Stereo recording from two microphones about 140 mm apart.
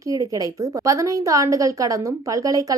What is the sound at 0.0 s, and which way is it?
A woman's voice, 25° right (ahead or behind).